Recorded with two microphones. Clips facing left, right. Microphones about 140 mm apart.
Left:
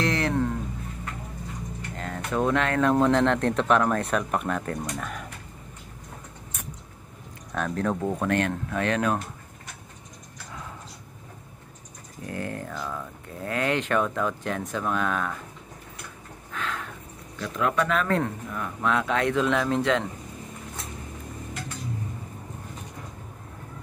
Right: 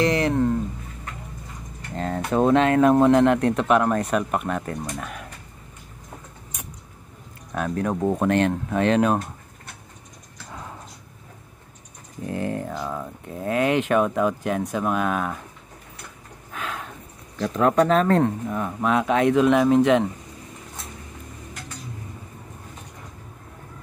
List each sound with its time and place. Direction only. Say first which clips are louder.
0.0 s a sound: right 5 dB; 5° right (ahead or behind)
2.0 s speech: right 6 dB; 35° right (ahead or behind); by 5.2 s 5° right (ahead or behind)
7.5 s speech: right 2 dB; 5° right (ahead or behind)
12.3 s speech: right 5 dB; 20° right (ahead or behind)
16.5 s a sound: right 1 dB; 15° right (ahead or behind)
17.4 s speech: right 7 dB; 40° right (ahead or behind); by 20.1 s 15° right (ahead or behind)